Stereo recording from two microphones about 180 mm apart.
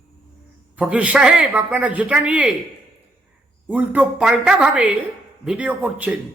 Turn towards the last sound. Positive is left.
turn(degrees=-10)  # may be behind; listen again after turning